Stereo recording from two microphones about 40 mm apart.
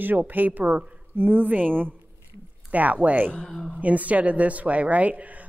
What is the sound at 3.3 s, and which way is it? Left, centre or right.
Speech, centre.